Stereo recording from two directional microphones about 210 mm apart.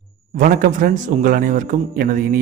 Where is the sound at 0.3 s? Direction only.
40° right (ahead or behind).